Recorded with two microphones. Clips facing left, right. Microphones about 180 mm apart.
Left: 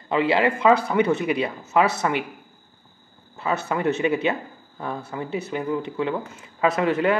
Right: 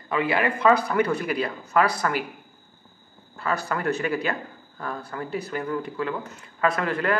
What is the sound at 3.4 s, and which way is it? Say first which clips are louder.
Speech: left 3 dB; 25° left (ahead or behind).